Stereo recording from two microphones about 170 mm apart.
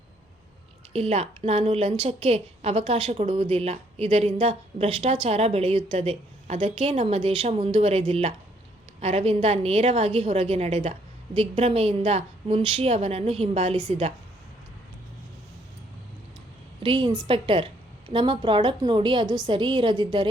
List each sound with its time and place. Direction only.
0.9 s a woman's voice: 35° right (ahead or behind)
16.8 s a woman's voice: 30° right (ahead or behind)